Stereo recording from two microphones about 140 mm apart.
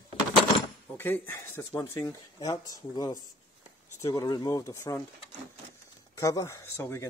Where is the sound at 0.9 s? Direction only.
15° left (ahead or behind).